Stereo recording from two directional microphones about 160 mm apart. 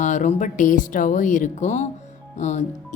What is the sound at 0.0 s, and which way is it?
Speech, 50° left (ahead or behind).